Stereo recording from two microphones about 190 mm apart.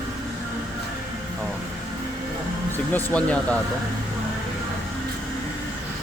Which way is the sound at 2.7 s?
10° left (ahead or behind).